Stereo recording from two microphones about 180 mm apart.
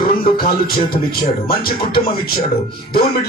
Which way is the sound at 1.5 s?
55° left (ahead or behind).